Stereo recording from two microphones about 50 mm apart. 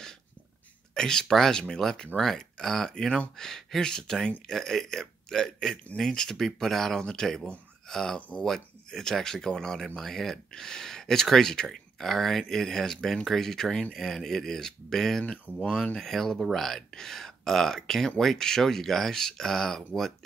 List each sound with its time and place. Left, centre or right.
0.9 s speech: centre
15.6 s speech: centre
16.0 s speech: centre